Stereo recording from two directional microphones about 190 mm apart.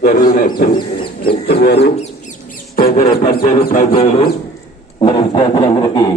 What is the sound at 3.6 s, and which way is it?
Speech, 50° left (ahead or behind).